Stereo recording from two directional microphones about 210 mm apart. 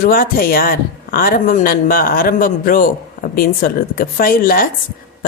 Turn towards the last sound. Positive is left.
turn(degrees=45)  # may be behind; listen again after turning